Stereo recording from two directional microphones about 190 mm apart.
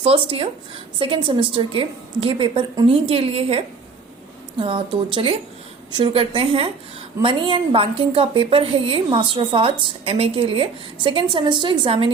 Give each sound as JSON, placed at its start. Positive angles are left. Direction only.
{"t": 0.0, "sound": "a woman's voice", "side_deg": -30}